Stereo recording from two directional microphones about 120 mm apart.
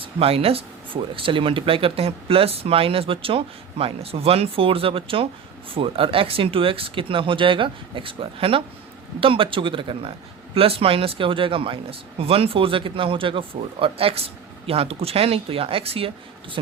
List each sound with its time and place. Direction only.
0.0 s speech: 55° right (ahead or behind)